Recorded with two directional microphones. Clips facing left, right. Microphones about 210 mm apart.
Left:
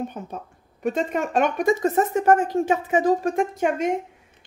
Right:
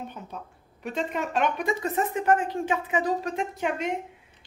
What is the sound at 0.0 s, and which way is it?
A woman's voice, 45° left (ahead or behind).